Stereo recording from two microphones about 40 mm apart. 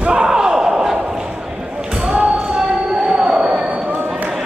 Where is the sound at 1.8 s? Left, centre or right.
Centre.